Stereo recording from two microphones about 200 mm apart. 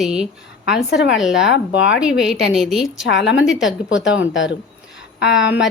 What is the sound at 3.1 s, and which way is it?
Speech, 60° left (ahead or behind).